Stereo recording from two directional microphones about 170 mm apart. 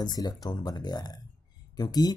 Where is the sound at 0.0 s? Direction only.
25° left (ahead or behind).